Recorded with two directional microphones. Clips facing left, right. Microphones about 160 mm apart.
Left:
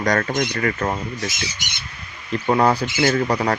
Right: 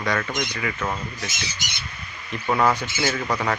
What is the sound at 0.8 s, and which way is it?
Speech, 35° left (ahead or behind).